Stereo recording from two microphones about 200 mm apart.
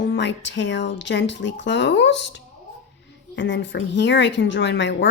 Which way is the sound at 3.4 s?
65° left (ahead or behind).